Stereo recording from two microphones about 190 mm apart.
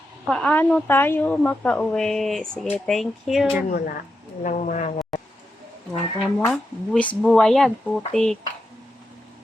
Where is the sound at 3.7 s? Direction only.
50° left (ahead or behind).